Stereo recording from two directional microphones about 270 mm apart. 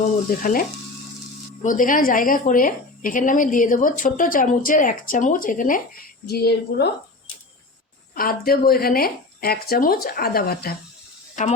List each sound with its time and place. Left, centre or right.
0.4 s a woman's voice: left
8.1 s a woman's voice: left